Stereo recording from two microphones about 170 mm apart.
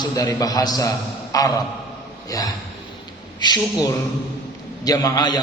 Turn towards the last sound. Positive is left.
turn(degrees=25)  # may be behind; listen again after turning